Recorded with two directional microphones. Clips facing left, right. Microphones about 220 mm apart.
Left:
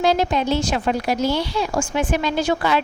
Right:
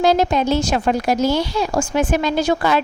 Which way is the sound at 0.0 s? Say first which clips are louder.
Right 3 dB; 45° right (ahead or behind).